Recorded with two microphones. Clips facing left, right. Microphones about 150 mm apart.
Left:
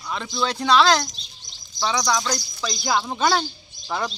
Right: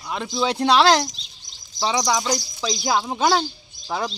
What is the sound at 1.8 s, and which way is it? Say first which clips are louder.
Speech: right 1 dB; 20° right (ahead or behind).